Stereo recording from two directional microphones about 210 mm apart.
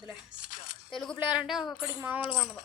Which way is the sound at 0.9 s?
Centre (ahead or behind).